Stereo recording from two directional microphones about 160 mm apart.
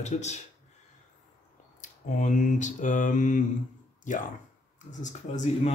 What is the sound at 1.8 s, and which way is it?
Speech, 50° left (ahead or behind).